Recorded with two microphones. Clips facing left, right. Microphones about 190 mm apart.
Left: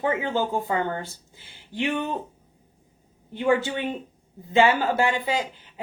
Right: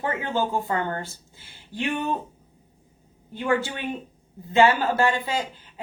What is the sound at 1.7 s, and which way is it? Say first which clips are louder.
Speech: left 1 dB; 15° left (ahead or behind).